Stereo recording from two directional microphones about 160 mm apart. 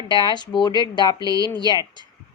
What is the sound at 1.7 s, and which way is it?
Speech, 25° left (ahead or behind).